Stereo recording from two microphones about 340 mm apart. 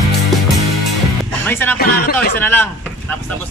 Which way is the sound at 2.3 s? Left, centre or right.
Centre.